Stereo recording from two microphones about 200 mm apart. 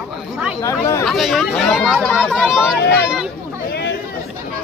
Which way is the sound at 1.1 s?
Centre (ahead or behind).